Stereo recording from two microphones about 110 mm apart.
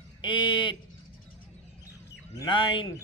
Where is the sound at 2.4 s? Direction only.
50° left (ahead or behind).